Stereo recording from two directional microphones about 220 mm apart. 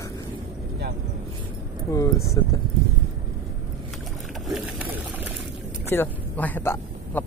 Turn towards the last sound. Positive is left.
turn(degrees=10)  # may be behind; listen again after turning